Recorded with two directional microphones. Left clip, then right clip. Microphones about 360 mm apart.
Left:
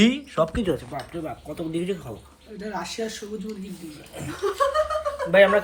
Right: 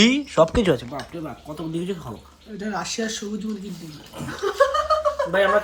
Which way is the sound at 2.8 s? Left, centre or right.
Centre.